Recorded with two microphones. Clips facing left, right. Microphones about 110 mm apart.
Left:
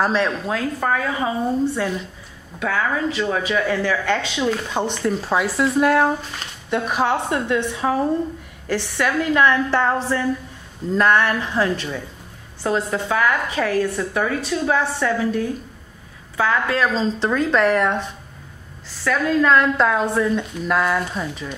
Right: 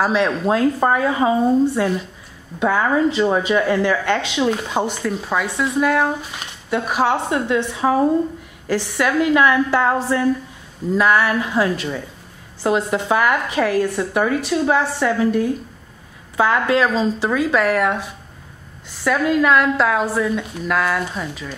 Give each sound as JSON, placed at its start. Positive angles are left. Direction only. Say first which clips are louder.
{"t": 0.0, "sound": "speech", "louder": "right 2 dB", "side_deg": -10}
{"t": 0.5, "sound": "a woman's voice", "louder": "right 5 dB", "side_deg": -25}
{"t": 1.8, "sound": "speech", "louder": "right 4 dB", "side_deg": -10}
{"t": 5.0, "sound": "a woman's voice", "louder": "left 1 dB", "side_deg": 0}